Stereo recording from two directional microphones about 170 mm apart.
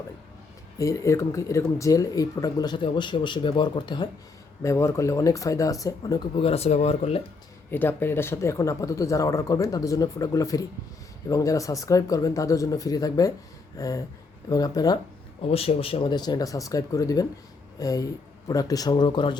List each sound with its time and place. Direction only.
0.8 s speech: 20° left (ahead or behind); by 7.2 s 40° left (ahead or behind)
7.7 s speech: 10° left (ahead or behind)
15.4 s speech: 35° left (ahead or behind)